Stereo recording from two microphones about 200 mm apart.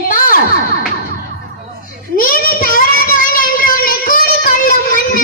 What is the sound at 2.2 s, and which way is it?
Child singing, 45° left (ahead or behind).